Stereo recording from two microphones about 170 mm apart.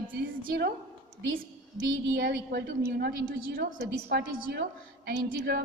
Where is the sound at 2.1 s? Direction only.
65° right (ahead or behind).